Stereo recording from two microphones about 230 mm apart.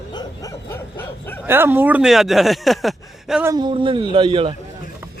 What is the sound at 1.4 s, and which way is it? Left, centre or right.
Speech, centre.